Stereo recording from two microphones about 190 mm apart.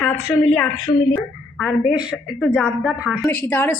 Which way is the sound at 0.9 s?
20° left (ahead or behind).